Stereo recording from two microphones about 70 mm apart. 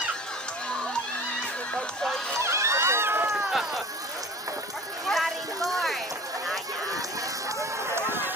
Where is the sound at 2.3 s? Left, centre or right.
Right.